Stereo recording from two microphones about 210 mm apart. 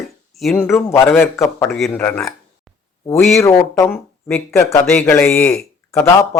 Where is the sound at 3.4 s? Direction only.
15° left (ahead or behind).